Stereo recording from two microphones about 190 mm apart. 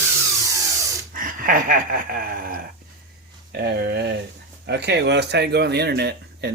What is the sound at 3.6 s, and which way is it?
Speech, 60° right (ahead or behind).